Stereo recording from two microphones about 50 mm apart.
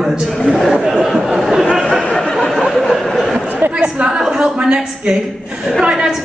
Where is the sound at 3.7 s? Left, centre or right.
Right.